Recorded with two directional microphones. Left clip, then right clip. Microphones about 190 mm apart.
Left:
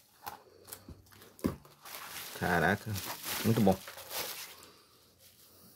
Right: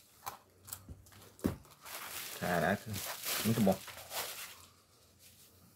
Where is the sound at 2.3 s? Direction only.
65° left (ahead or behind).